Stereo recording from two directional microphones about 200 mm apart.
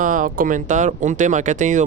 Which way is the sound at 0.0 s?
40° right (ahead or behind).